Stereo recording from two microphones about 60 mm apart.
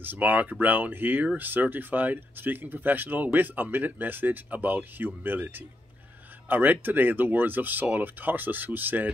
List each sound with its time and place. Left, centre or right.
0.0 s speech: right